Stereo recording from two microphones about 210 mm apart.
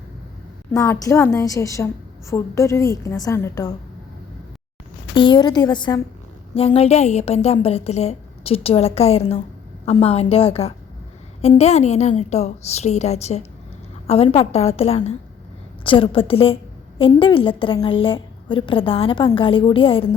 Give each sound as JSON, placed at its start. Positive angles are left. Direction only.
{"t": 0.7, "sound": "a woman's voice", "side_deg": 15}
{"t": 5.1, "sound": "a woman's voice", "side_deg": 20}
{"t": 6.7, "sound": "a woman's voice", "side_deg": 30}